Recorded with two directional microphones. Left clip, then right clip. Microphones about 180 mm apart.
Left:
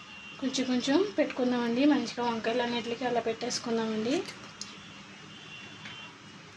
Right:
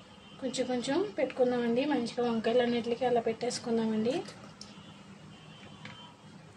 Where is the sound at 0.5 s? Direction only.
20° left (ahead or behind).